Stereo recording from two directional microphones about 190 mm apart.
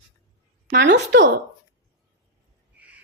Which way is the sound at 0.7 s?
65° right (ahead or behind).